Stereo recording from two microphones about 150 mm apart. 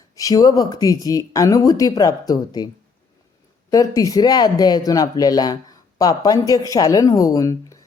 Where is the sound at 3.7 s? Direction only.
20° left (ahead or behind).